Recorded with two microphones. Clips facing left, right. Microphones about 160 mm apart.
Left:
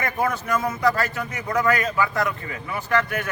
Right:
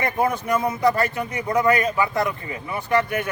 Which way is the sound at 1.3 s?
30° right (ahead or behind).